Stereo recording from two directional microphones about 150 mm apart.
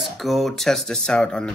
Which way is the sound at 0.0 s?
Centre (ahead or behind).